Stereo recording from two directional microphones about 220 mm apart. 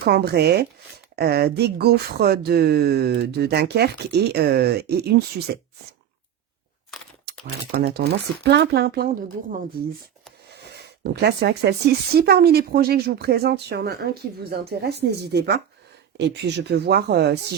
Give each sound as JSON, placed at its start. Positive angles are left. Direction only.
{"t": 0.0, "sound": "speech", "side_deg": -45}
{"t": 7.7, "sound": "speech", "side_deg": -50}
{"t": 10.5, "sound": "speech", "side_deg": -45}